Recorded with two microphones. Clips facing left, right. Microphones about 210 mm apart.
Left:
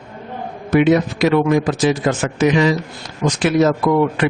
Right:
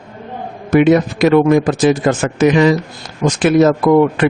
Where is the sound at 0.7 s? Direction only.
50° right (ahead or behind).